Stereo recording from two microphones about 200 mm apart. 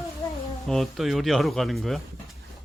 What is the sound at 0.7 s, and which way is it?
Speech, centre (ahead or behind).